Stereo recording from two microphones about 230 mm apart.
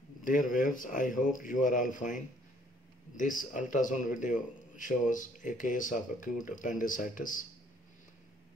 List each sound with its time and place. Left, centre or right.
0.2 s a man's voice: left